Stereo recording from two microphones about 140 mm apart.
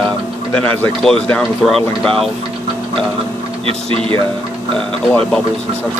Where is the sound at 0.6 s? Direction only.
10° left (ahead or behind).